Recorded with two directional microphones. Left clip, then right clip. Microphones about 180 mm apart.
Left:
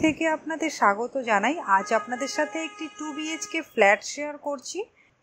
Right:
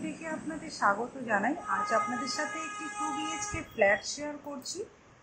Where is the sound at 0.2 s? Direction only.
55° left (ahead or behind).